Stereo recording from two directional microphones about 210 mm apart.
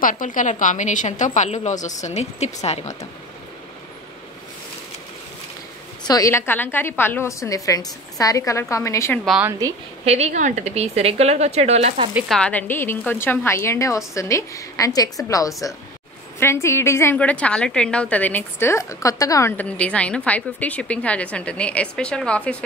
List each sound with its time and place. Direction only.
0.0 s a woman's voice: 40° left (ahead or behind)
6.0 s a woman's voice: 15° left (ahead or behind)
9.2 s a woman's voice: centre (ahead or behind)
9.5 s a woman's voice: 15° right (ahead or behind)
10.0 s a woman's voice: 30° right (ahead or behind)
12.1 s a woman's voice: 5° right (ahead or behind)
12.4 s a woman's voice: 5° left (ahead or behind)